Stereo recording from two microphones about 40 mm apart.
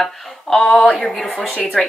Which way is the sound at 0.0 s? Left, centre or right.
Centre.